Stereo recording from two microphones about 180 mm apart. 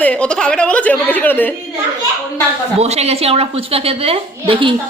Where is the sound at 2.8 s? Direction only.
35° right (ahead or behind).